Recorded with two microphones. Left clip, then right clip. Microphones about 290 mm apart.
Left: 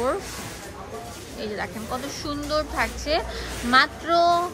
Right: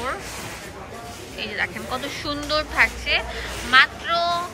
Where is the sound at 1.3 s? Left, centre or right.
Centre.